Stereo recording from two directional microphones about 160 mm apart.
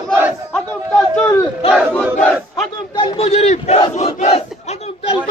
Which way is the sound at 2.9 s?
35° left (ahead or behind).